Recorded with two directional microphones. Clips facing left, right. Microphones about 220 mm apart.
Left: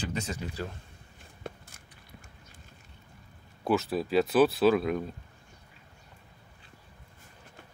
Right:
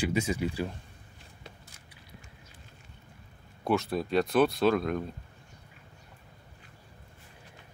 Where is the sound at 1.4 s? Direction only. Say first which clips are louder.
Left 10 dB; 50° left (ahead or behind).